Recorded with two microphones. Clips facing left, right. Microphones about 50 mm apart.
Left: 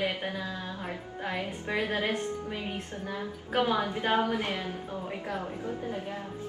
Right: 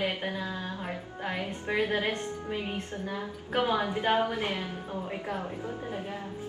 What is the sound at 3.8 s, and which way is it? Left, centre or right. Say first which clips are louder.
Music: even; centre.